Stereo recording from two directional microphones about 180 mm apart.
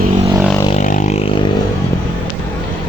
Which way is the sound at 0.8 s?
45° left (ahead or behind).